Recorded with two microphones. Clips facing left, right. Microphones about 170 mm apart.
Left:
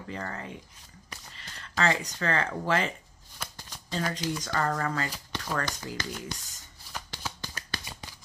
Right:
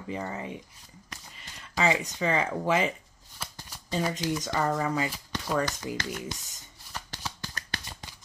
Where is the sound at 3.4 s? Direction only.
10° right (ahead or behind).